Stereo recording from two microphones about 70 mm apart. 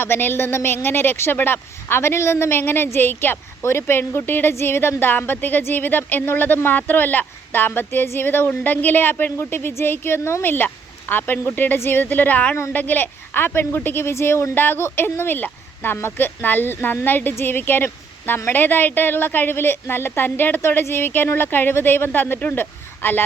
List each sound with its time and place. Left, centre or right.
0.0 s a woman's voice: left